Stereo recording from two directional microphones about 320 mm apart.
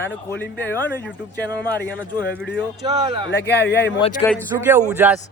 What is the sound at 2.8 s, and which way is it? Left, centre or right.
Speech, centre.